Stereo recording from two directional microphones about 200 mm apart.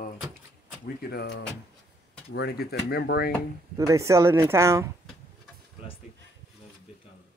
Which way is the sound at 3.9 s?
15° right (ahead or behind).